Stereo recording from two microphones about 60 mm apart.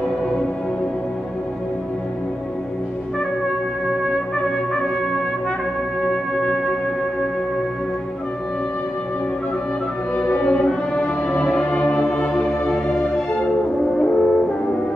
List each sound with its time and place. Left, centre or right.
6.3 s music: centre
10.3 s music: left
10.7 s music: centre
13.9 s french horn: centre